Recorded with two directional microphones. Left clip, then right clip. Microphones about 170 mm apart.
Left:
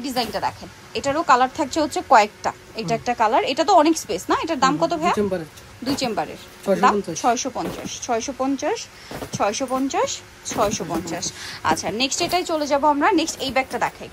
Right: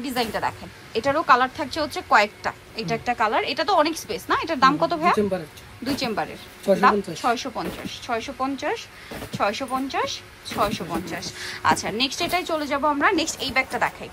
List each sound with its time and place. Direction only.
0.0 s a woman's voice: 20° left (ahead or behind)